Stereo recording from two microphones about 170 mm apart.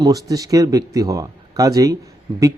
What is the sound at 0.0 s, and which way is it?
A man's voice, 20° right (ahead or behind).